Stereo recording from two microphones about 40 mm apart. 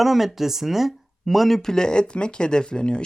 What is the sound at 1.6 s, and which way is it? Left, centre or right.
Speech, centre.